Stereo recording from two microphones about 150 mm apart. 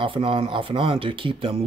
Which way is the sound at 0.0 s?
35° right (ahead or behind).